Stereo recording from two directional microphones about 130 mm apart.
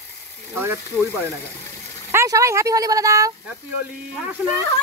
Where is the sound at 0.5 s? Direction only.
20° right (ahead or behind).